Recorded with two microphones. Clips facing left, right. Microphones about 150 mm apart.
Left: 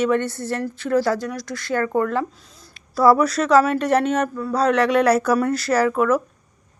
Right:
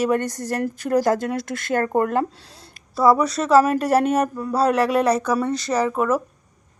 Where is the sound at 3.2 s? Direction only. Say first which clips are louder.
Even; centre (ahead or behind).